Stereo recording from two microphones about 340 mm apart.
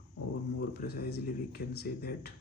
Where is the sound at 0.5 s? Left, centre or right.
Left.